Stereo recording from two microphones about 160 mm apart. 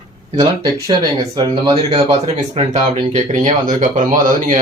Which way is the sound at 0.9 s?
25° right (ahead or behind).